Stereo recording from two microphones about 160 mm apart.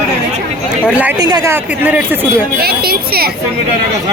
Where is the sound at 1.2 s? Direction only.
25° right (ahead or behind).